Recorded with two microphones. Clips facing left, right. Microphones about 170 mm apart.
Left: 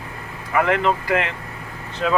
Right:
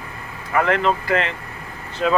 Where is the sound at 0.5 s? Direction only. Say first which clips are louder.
Even; 15° left (ahead or behind).